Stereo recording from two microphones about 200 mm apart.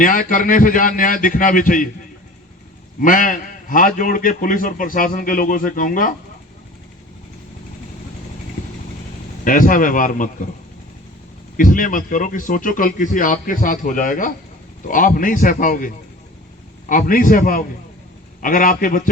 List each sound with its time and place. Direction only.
0.0 s a man's voice: 40° left (ahead or behind)
3.0 s a man's voice: 40° left (ahead or behind)
9.4 s speech: 40° left (ahead or behind)
11.5 s speech: 40° left (ahead or behind)
16.9 s a man's voice: 45° left (ahead or behind)